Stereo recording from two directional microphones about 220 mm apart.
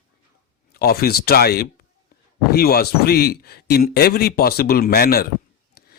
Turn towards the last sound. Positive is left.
turn(degrees=45)  # may be behind; listen again after turning